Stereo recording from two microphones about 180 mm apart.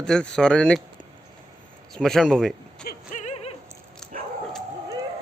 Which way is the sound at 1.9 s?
Centre (ahead or behind).